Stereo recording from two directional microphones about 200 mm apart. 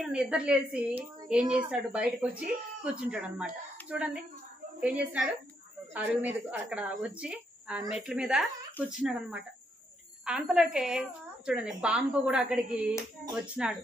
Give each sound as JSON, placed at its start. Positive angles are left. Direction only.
{"t": 0.0, "sound": "a woman's voice", "side_deg": -5}